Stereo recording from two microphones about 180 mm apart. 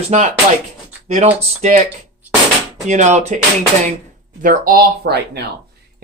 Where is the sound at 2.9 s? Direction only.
40° right (ahead or behind).